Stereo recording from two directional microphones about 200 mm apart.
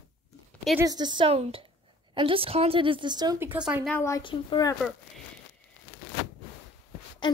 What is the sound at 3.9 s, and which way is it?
Speech, 10° left (ahead or behind).